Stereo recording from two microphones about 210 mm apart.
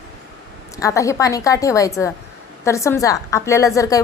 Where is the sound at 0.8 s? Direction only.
15° left (ahead or behind).